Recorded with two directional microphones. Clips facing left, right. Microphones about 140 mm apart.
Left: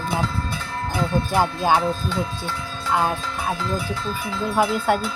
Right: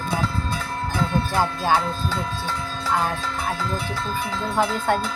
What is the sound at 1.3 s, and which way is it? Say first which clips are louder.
Speech: left 2 dB; 15° left (ahead or behind).